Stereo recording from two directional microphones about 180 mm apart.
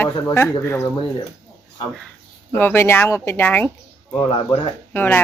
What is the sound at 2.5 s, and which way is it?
Speech, 15° left (ahead or behind).